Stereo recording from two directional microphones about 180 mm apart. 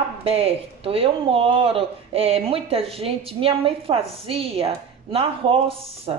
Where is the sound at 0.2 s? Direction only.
35° right (ahead or behind).